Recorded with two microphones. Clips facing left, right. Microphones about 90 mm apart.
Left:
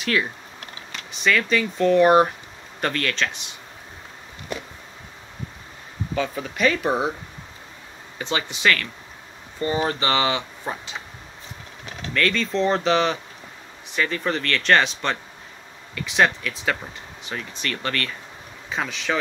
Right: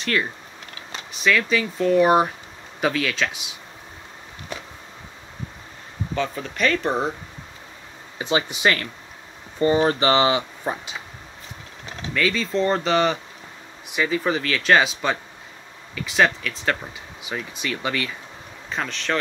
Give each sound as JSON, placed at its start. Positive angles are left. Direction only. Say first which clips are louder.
{"t": 0.0, "sound": "speech", "louder": "even", "side_deg": 0}
{"t": 6.1, "sound": "speech", "louder": "even", "side_deg": 5}
{"t": 8.2, "sound": "speech", "louder": "right 3 dB", "side_deg": -15}
{"t": 12.1, "sound": "speech", "louder": "even", "side_deg": -5}
{"t": 18.7, "sound": "speech", "louder": "even", "side_deg": 5}